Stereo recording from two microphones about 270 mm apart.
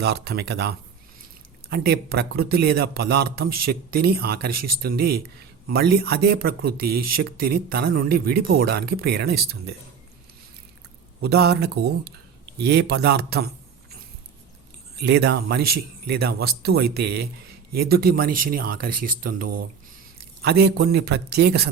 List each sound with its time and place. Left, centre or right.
0.0 s speech: right
11.2 s speech: right
15.0 s speech: right